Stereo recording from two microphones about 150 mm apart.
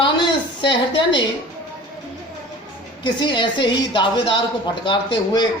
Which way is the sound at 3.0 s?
30° left (ahead or behind).